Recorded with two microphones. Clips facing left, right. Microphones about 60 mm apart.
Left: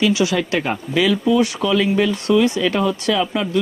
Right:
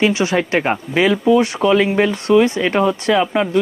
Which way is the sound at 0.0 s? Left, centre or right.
Right.